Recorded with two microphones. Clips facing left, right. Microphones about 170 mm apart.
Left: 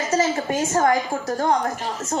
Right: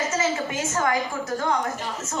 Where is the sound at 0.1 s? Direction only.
35° left (ahead or behind).